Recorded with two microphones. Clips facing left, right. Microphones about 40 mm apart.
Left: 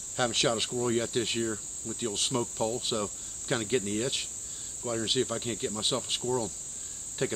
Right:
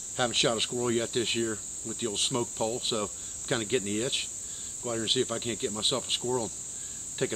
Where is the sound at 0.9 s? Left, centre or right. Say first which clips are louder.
Right 1 dB; centre.